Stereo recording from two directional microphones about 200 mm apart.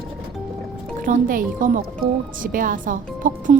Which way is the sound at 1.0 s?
45° right (ahead or behind).